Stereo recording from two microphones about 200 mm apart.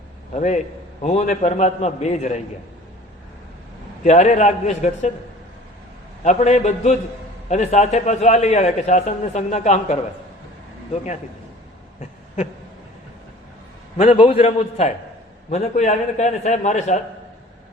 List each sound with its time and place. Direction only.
0.3 s a man's voice: 35° left (ahead or behind)
4.0 s a man's voice: 35° left (ahead or behind)
6.2 s a man's voice: 35° left (ahead or behind)
13.9 s a man's voice: 35° left (ahead or behind)